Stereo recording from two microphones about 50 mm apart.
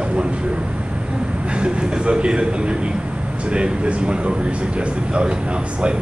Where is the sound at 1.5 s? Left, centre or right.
Right.